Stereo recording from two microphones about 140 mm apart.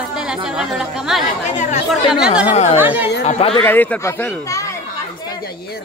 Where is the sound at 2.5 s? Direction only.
50° left (ahead or behind).